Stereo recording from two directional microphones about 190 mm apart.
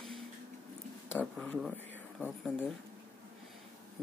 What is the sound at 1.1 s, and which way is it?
Speech, 10° left (ahead or behind).